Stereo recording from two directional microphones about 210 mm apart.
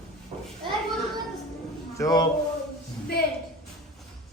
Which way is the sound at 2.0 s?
20° left (ahead or behind).